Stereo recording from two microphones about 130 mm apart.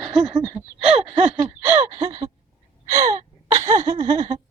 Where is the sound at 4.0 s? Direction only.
40° right (ahead or behind).